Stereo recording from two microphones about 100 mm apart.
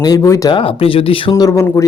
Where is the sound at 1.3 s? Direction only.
35° left (ahead or behind).